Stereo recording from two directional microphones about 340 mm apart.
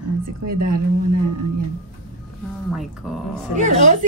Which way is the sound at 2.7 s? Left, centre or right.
Centre.